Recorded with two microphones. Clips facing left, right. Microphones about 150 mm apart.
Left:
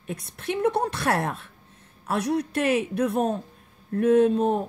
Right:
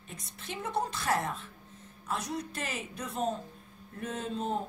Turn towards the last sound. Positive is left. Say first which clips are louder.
# left 14 dB
turn(degrees=60)  # may be behind; listen again after turning